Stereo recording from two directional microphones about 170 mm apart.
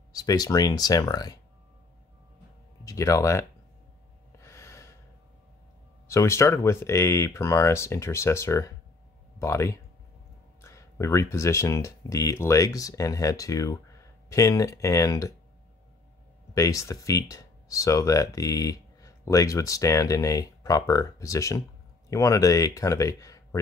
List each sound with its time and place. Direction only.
0.1 s speech: 20° left (ahead or behind)
2.8 s speech: 20° left (ahead or behind)
4.4 s gasp: 15° left (ahead or behind)
6.0 s speech: 15° left (ahead or behind)
16.5 s speech: 20° left (ahead or behind)